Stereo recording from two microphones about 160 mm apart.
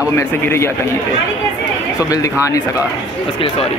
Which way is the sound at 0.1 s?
15° left (ahead or behind).